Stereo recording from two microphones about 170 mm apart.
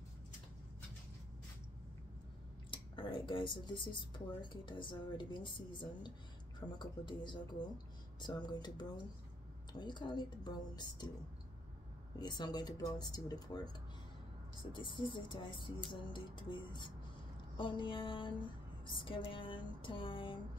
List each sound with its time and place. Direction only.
2.7 s speech: 30° left (ahead or behind)
12.2 s speech: 25° left (ahead or behind)
14.7 s speech: 30° left (ahead or behind)